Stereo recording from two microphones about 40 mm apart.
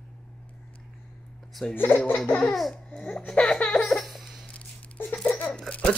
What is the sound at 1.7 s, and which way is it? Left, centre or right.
Speech, left.